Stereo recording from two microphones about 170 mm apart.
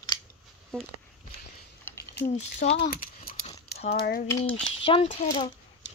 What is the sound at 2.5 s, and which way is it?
Speech, 45° left (ahead or behind).